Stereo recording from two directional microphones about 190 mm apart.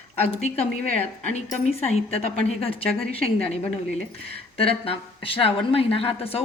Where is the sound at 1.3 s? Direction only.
35° left (ahead or behind).